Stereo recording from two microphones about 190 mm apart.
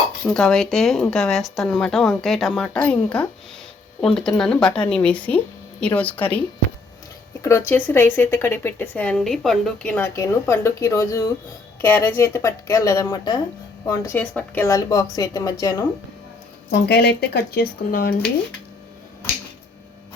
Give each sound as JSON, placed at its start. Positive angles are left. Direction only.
{"t": 0.3, "sound": "speech", "side_deg": 5}
{"t": 7.4, "sound": "speech", "side_deg": 15}
{"t": 16.7, "sound": "speech", "side_deg": 60}